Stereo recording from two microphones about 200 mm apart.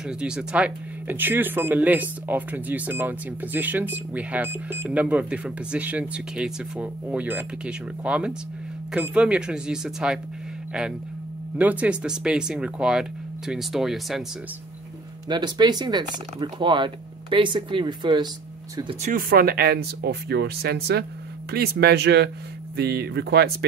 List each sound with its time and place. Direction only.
0.0 s speech: 5° right (ahead or behind)
15.2 s speech: 20° right (ahead or behind)
19.0 s speech: 45° right (ahead or behind)